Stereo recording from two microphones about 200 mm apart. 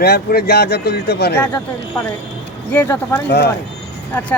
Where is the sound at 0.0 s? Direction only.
55° left (ahead or behind).